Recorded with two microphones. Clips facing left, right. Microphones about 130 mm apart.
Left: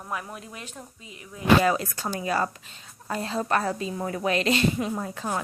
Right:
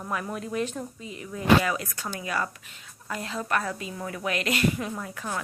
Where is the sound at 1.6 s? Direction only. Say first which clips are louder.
Left 5 dB; 30° left (ahead or behind).